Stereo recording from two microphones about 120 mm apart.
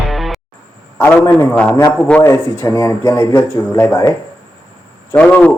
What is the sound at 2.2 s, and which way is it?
Speech, 25° left (ahead or behind).